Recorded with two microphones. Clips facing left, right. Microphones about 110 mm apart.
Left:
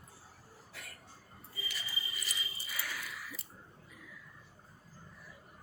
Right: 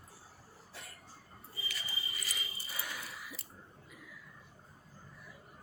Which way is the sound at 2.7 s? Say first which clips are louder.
Left 2 dB; 25° right (ahead or behind).